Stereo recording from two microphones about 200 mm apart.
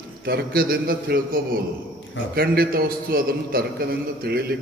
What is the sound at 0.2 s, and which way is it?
A man's voice, 50° right (ahead or behind).